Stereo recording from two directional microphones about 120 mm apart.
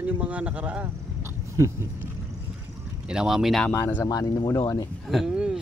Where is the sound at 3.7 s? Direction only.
15° left (ahead or behind).